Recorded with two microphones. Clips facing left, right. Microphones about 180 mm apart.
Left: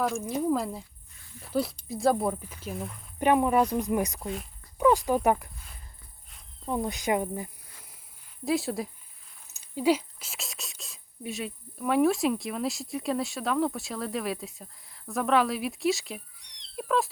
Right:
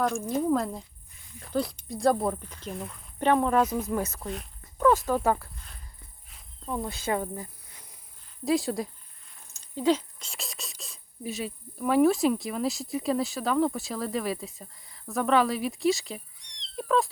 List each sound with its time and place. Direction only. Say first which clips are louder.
0.3 s speech: right 1 dB; 5° left (ahead or behind)
4.2 s speech: left 1 dB; centre (ahead or behind)
4.8 s speech: even; 15° left (ahead or behind)
6.7 s speech: left 2 dB; 20° left (ahead or behind)
8.4 s speech: right 2 dB; centre (ahead or behind)